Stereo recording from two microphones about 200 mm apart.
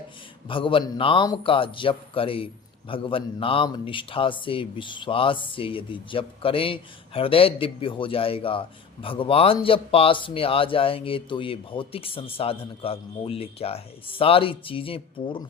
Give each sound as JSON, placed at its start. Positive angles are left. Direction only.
{"t": 0.4, "sound": "speech", "side_deg": 25}